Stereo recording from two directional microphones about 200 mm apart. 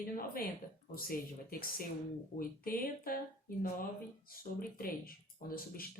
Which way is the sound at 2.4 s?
45° left (ahead or behind).